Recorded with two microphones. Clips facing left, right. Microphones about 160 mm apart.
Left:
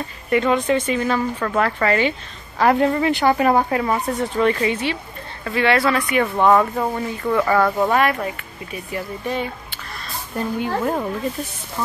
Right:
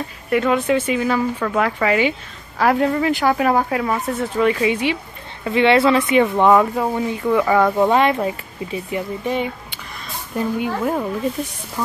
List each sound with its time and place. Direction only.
0.3 s speech: 5° right (ahead or behind)
2.6 s speech: centre (ahead or behind); by 9.5 s 20° right (ahead or behind)
10.3 s speech: 5° right (ahead or behind)